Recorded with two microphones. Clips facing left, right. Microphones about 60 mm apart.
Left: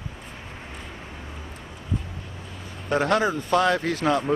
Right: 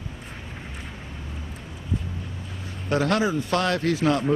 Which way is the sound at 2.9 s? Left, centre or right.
Centre.